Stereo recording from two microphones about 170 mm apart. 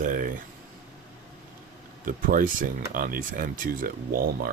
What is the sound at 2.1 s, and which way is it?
Speech, 55° right (ahead or behind).